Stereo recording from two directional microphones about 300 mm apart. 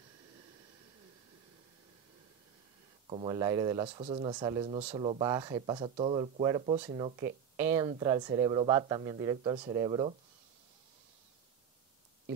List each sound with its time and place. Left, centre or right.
3.1 s speech: centre